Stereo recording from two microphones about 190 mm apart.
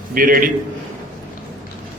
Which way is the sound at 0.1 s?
45° right (ahead or behind).